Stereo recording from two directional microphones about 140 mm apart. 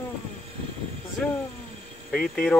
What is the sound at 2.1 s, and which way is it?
Speech, 5° left (ahead or behind).